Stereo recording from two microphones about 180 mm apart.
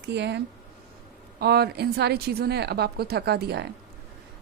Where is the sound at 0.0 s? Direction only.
70° right (ahead or behind).